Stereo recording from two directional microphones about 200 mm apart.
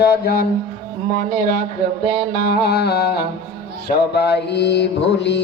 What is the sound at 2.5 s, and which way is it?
Music, 55° left (ahead or behind).